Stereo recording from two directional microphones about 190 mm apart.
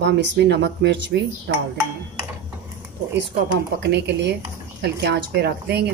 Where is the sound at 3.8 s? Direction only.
65° right (ahead or behind).